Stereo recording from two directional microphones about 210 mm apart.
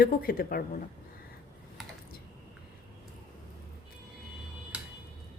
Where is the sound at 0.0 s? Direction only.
45° left (ahead or behind).